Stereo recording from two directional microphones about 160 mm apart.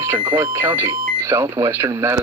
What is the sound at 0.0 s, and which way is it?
Speech, 15° right (ahead or behind).